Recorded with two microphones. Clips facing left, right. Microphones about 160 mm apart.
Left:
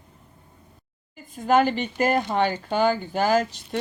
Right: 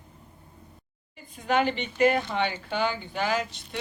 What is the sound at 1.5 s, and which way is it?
Speech, 45° left (ahead or behind).